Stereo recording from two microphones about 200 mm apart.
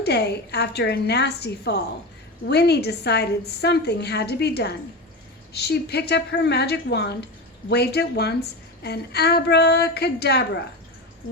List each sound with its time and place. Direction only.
0.0 s a woman's voice: 55° left (ahead or behind)